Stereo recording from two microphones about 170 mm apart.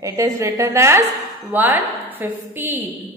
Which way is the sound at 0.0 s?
20° right (ahead or behind).